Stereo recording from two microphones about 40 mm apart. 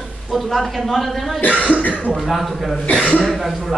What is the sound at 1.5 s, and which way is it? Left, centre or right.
Speech, right.